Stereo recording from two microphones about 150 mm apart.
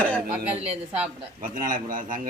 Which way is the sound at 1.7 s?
65° right (ahead or behind).